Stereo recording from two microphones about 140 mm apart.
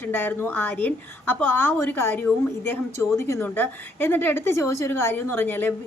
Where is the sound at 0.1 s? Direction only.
15° left (ahead or behind).